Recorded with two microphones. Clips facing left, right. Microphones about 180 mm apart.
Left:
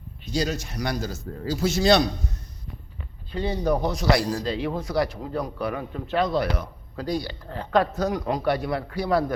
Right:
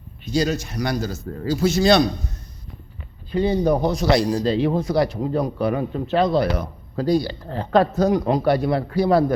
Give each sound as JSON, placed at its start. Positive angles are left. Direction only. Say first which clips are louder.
{"t": 0.3, "sound": "a man's voice", "louder": "right 5 dB", "side_deg": -65}
{"t": 3.3, "sound": "speech", "louder": "right 6 dB", "side_deg": -20}